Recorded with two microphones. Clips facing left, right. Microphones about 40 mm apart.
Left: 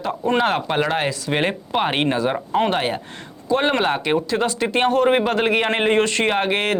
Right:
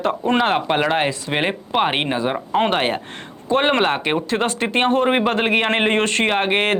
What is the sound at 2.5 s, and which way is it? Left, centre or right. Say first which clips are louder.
Speech: right 3 dB; right.